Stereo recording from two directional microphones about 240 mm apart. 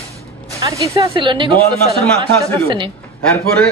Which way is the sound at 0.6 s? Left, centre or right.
Centre.